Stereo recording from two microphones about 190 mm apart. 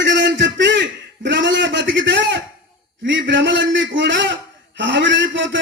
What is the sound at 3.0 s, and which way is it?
A man's voice, 70° right (ahead or behind).